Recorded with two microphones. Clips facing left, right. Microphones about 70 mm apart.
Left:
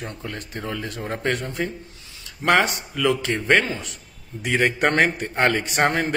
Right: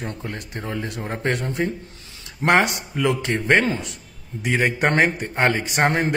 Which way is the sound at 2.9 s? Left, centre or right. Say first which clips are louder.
Even; right.